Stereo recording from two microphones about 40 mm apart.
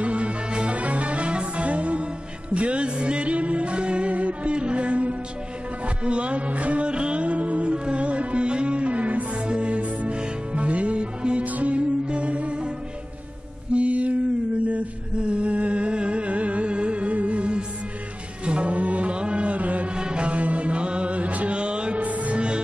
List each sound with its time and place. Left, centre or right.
0.0 s music: right
7.7 s music: right
13.7 s mantra: right
14.7 s music: right
20.0 s music: right
20.2 s music: right
22.0 s music: right